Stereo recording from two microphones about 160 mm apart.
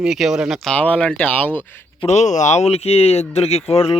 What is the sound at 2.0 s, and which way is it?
Speech, 45° left (ahead or behind).